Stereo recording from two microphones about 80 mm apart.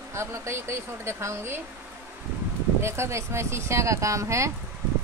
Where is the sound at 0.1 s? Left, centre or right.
Right.